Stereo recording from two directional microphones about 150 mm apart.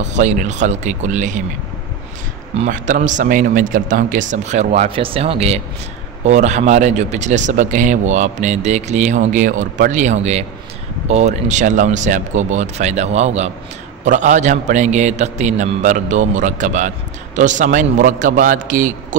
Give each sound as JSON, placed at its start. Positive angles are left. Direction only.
{"t": 0.0, "sound": "speech", "side_deg": -50}
{"t": 2.6, "sound": "a man's voice", "side_deg": -55}